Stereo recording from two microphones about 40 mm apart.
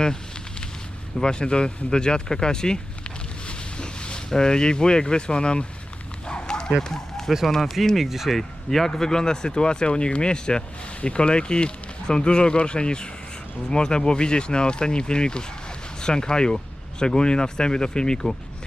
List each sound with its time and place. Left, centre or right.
1.2 s a sound: left
4.3 s speech: centre
6.2 s bow-wow: left
6.7 s speech: centre
8.4 s speech: centre